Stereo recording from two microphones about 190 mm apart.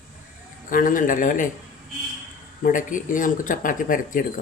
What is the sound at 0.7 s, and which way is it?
Speech, 45° left (ahead or behind).